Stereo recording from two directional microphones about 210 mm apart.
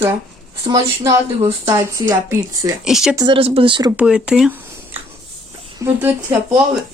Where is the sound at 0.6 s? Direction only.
15° right (ahead or behind).